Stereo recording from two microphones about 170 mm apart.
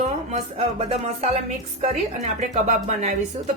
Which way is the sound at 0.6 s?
35° right (ahead or behind).